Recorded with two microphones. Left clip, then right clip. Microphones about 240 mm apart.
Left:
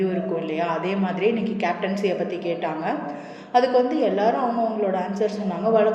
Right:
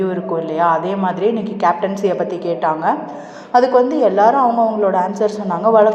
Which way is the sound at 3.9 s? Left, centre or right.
Right.